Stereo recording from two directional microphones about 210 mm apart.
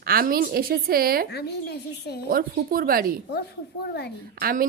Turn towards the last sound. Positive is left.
turn(degrees=-45)  # may be behind; listen again after turning